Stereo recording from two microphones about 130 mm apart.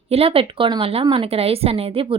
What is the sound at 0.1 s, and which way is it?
Speech, 50° right (ahead or behind).